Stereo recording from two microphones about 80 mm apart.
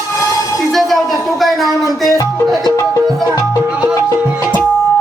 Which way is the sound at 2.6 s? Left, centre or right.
Left.